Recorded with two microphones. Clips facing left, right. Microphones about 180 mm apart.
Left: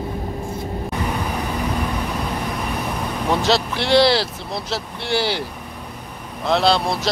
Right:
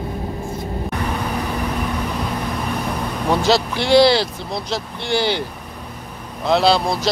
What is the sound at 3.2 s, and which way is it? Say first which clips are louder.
Speech: right 2 dB; centre (ahead or behind).